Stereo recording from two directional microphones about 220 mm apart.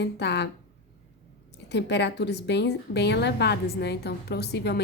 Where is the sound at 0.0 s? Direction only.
50° left (ahead or behind).